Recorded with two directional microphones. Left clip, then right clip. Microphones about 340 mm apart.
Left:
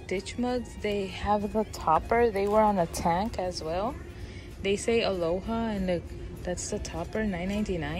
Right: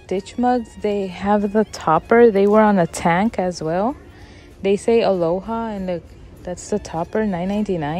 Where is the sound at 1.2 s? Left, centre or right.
Right.